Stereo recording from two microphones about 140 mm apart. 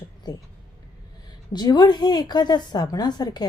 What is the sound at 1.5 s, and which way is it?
A woman's voice, 30° left (ahead or behind).